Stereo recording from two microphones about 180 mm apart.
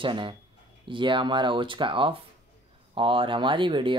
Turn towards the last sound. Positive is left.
turn(degrees=-25)  # may be behind; listen again after turning